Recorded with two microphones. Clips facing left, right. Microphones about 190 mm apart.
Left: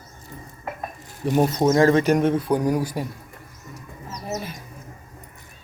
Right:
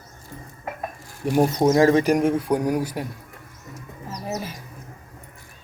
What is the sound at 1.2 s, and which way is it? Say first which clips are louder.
Speech: right 1 dB; 10° right (ahead or behind).